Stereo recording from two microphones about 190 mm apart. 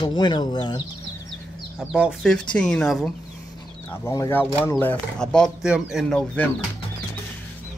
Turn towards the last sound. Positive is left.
turn(degrees=5)  # may be behind; listen again after turning